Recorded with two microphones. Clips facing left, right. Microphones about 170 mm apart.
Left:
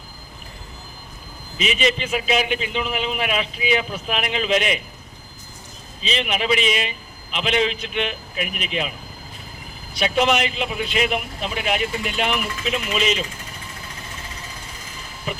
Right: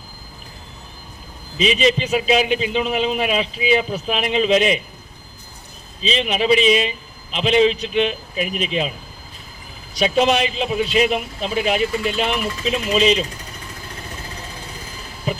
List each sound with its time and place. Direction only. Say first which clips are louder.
1.5 s a man's voice: right 4 dB; 35° right (ahead or behind)
6.0 s a man's voice: right 4 dB; 30° right (ahead or behind)
9.9 s a man's voice: right 3 dB; 30° right (ahead or behind)